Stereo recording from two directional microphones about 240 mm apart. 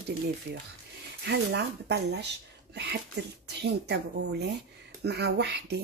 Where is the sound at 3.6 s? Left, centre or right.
Right.